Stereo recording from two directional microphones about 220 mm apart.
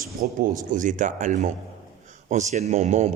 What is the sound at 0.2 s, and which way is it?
Speech, 40° right (ahead or behind).